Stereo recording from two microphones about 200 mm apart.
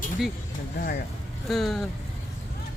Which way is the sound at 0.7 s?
45° left (ahead or behind).